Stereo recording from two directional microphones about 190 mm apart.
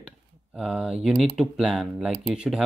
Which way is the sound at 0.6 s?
5° right (ahead or behind).